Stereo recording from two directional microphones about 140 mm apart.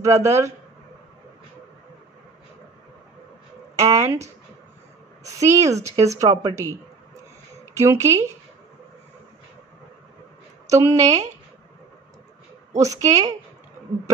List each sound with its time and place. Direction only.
0.0 s speech: 20° right (ahead or behind)
3.8 s speech: 20° right (ahead or behind)
10.7 s speech: 20° right (ahead or behind)
12.7 s speech: 25° right (ahead or behind)